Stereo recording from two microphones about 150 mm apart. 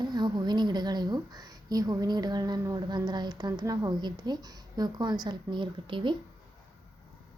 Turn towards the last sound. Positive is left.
turn(degrees=-35)  # may be behind; listen again after turning